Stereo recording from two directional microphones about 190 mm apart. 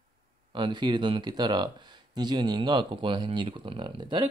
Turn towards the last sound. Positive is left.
turn(degrees=-25)  # may be behind; listen again after turning